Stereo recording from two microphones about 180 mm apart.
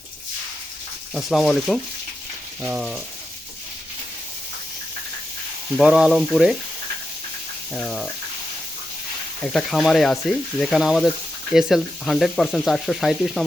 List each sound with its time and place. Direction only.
1.1 s speech: centre (ahead or behind)
5.7 s speech: 5° right (ahead or behind)
7.7 s speech: 5° left (ahead or behind)
9.4 s speech: centre (ahead or behind)